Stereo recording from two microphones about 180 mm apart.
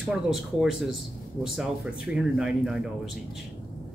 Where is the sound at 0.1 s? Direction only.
Centre (ahead or behind).